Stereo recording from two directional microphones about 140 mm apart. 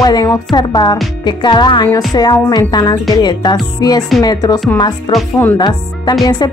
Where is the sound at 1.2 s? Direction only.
30° left (ahead or behind).